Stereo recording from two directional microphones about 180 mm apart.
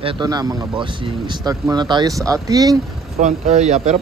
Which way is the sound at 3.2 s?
40° right (ahead or behind).